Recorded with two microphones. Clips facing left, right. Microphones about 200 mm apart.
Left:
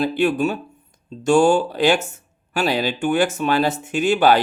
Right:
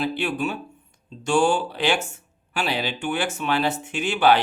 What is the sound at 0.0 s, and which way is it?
Speech, 45° left (ahead or behind).